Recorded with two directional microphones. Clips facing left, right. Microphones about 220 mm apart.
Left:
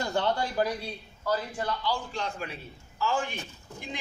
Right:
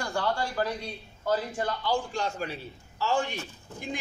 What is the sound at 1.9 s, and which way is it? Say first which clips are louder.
A man's voice: right 3 dB; 45° right (ahead or behind).